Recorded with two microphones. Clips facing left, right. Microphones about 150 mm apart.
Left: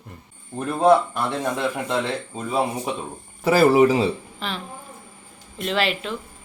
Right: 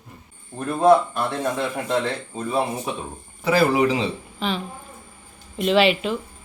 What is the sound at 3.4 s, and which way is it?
Speech, 45° left (ahead or behind).